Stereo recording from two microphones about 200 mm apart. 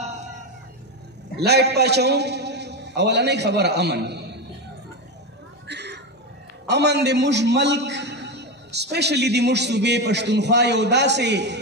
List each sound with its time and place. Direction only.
1.4 s a man's voice: 55° right (ahead or behind)
5.7 s a sound: 60° right (ahead or behind)
6.7 s a man's voice: 55° right (ahead or behind)